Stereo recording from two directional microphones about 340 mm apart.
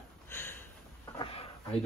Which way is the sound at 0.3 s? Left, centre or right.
Centre.